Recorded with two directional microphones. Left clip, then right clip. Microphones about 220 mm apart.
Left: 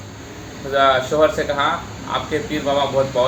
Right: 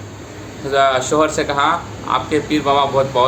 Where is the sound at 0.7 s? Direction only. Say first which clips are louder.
Right 1 dB; 20° right (ahead or behind).